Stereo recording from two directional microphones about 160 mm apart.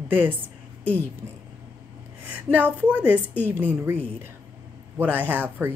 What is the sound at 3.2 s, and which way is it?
Speech, 10° left (ahead or behind).